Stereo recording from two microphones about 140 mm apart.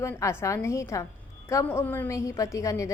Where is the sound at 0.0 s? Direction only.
20° left (ahead or behind).